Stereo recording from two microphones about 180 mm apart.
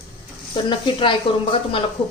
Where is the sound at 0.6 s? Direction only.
25° left (ahead or behind).